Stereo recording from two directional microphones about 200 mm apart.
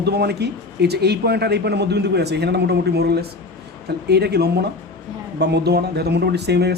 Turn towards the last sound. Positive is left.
turn(degrees=-55)  # may be behind; listen again after turning